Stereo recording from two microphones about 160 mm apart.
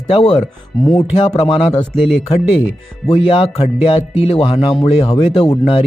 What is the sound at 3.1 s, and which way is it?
Speech, 35° left (ahead or behind).